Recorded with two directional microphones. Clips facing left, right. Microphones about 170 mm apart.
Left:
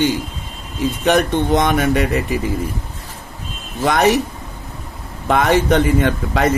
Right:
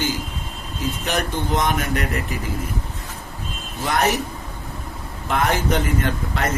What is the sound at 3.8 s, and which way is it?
Speech, 75° left (ahead or behind).